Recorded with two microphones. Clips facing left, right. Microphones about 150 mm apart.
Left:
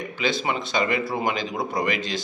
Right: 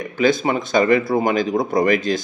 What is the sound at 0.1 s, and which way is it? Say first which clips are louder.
Speech: right 9 dB; 45° right (ahead or behind).